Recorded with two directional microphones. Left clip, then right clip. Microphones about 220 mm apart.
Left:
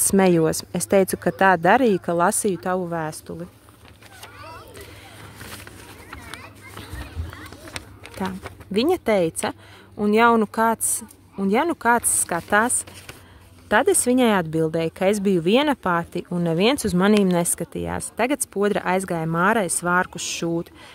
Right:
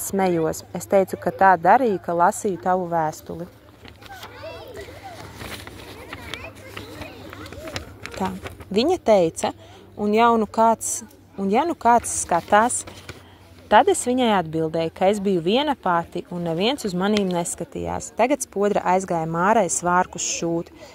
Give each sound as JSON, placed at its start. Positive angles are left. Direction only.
{"t": 0.1, "sound": "speech", "side_deg": 30}
{"t": 7.7, "sound": "speech", "side_deg": 20}